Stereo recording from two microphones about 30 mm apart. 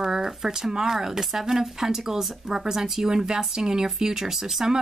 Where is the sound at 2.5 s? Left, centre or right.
Right.